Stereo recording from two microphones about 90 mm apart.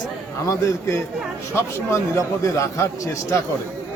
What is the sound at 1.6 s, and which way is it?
Speech, 30° left (ahead or behind).